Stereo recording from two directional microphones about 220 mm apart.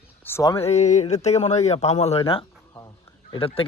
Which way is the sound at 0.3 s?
10° left (ahead or behind).